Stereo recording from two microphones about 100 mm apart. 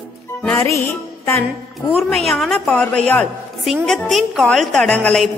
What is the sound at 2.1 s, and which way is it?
A woman's voice, 5° left (ahead or behind).